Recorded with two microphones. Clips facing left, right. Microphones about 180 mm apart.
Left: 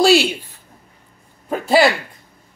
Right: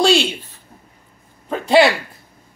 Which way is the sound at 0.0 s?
5° left (ahead or behind).